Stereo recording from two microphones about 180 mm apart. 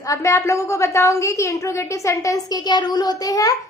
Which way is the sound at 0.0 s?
15° left (ahead or behind).